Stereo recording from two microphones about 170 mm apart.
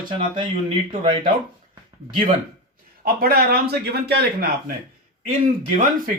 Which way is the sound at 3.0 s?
60° right (ahead or behind).